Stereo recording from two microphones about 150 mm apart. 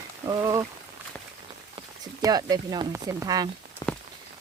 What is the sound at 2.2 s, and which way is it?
Speech, 25° right (ahead or behind).